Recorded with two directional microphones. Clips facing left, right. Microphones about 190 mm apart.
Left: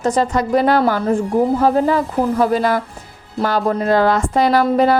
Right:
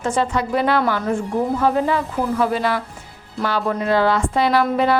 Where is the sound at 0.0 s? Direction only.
40° left (ahead or behind).